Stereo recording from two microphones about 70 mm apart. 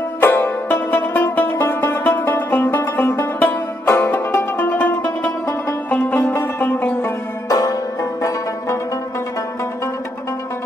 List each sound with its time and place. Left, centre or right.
0.2 s music: left
7.4 s music: left